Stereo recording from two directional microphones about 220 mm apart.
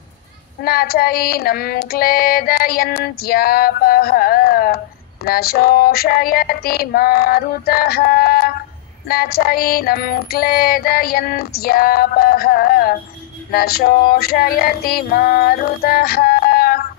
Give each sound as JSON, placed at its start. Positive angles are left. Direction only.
{"t": 0.7, "sound": "female singing", "side_deg": 45}